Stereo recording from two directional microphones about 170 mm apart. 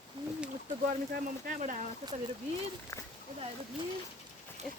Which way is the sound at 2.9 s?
15° left (ahead or behind).